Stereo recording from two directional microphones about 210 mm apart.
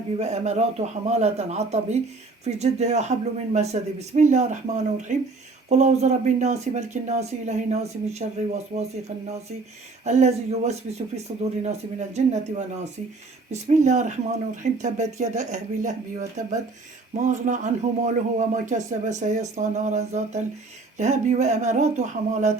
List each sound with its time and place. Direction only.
0.2 s a man's voice: 30° right (ahead or behind)